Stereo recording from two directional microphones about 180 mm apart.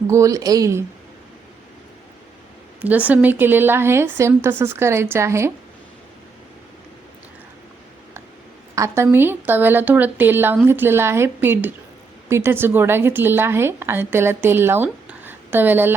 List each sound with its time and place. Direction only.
0.1 s a woman's voice: 15° right (ahead or behind)
2.8 s a woman's voice: 10° right (ahead or behind)
8.7 s a woman's voice: 15° right (ahead or behind)